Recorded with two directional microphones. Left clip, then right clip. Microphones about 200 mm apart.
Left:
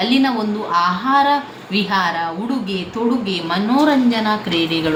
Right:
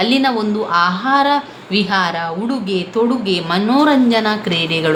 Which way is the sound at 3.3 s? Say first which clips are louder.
Right 3 dB; 50° right (ahead or behind).